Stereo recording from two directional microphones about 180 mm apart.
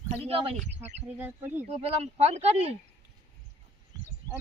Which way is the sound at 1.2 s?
10° right (ahead or behind).